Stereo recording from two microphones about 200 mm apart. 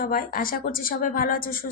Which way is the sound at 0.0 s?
45° left (ahead or behind).